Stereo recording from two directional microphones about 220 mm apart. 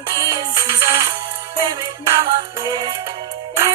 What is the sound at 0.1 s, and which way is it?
Music, 15° right (ahead or behind).